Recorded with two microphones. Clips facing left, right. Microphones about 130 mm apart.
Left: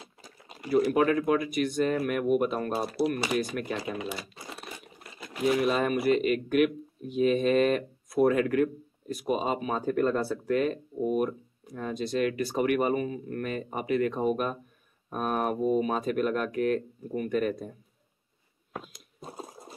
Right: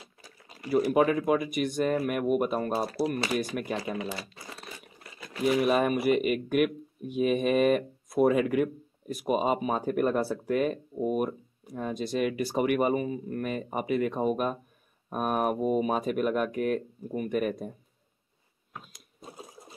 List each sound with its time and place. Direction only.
0.0 s a sound: 25° left (ahead or behind)
0.7 s speech: 5° right (ahead or behind)
4.1 s crumpling: 15° left (ahead or behind)
5.5 s speech: 5° right (ahead or behind)